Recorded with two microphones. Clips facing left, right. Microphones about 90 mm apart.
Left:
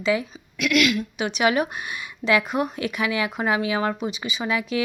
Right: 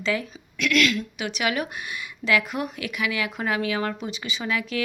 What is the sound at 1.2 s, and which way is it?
Speech, 25° left (ahead or behind).